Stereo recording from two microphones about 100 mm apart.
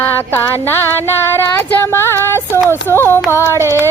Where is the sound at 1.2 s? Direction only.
25° left (ahead or behind).